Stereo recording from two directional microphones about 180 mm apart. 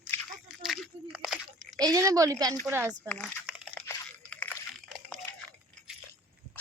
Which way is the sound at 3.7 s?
5° left (ahead or behind).